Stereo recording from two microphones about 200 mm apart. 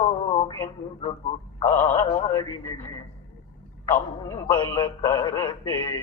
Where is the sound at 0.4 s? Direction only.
20° left (ahead or behind).